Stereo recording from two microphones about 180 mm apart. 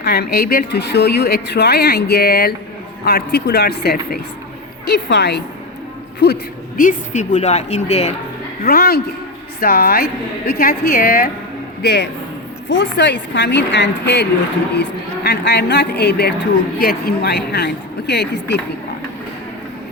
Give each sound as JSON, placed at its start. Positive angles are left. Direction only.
{"t": 0.0, "sound": "speech", "side_deg": 65}
{"t": 5.0, "sound": "a woman's voice", "side_deg": 75}
{"t": 8.6, "sound": "speech", "side_deg": 60}
{"t": 11.8, "sound": "a man's voice", "side_deg": 70}
{"t": 12.6, "sound": "a woman's voice", "side_deg": 85}